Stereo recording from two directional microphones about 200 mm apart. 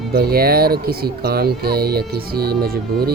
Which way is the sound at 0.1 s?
50° right (ahead or behind).